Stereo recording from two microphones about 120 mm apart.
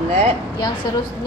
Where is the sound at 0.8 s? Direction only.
35° left (ahead or behind).